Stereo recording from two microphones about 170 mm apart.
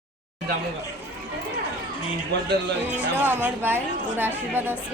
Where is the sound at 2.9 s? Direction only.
10° right (ahead or behind).